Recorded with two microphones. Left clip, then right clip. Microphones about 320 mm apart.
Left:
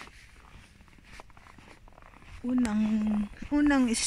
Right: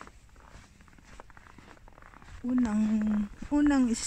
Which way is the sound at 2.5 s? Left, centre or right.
Centre.